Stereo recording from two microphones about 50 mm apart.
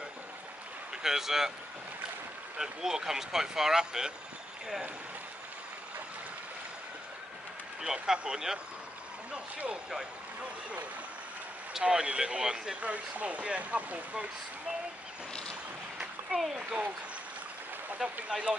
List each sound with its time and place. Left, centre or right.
1.0 s speech: centre
2.5 s speech: centre
7.8 s speech: centre
11.8 s speech: centre
16.3 s a sound: right
18.3 s speech: right